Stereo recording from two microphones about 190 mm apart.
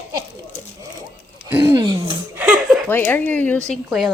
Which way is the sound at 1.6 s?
15° right (ahead or behind).